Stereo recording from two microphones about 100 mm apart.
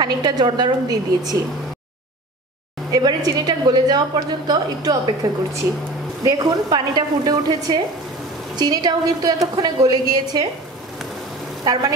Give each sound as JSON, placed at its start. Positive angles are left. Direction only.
{"t": 0.0, "sound": "a woman's voice", "side_deg": -45}
{"t": 2.9, "sound": "a woman's voice", "side_deg": -45}
{"t": 6.2, "sound": "a woman's voice", "side_deg": -45}
{"t": 11.6, "sound": "speech", "side_deg": -40}